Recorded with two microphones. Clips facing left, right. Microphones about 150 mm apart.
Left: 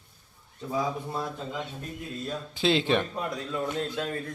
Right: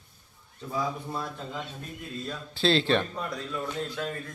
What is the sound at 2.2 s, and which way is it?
Speech, 15° left (ahead or behind).